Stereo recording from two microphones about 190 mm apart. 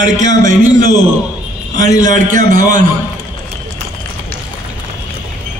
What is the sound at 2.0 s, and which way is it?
Speech, 40° right (ahead or behind).